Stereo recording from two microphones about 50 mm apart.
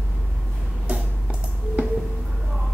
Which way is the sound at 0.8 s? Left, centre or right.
Centre.